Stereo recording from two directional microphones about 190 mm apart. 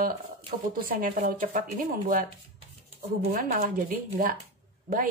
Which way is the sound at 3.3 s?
45° right (ahead or behind).